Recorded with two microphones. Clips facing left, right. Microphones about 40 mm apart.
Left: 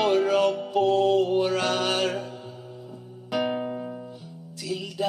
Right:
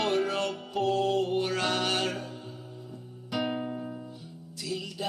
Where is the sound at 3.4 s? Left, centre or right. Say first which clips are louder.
Left 4 dB; centre.